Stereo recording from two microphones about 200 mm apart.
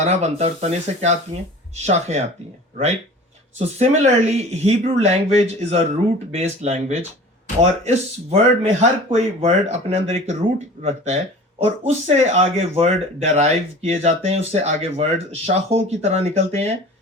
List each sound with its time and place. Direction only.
0.0 s speech: 35° right (ahead or behind)